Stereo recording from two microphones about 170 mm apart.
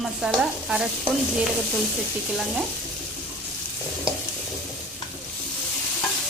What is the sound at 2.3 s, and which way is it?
Frying, centre (ahead or behind).